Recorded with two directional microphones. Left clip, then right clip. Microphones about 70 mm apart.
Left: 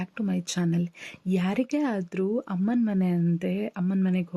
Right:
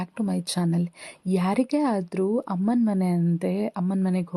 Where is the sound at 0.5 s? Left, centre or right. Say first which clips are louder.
Right 1 dB; centre.